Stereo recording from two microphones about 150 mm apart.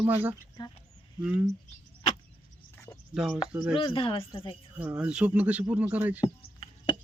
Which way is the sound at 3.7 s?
35° left (ahead or behind).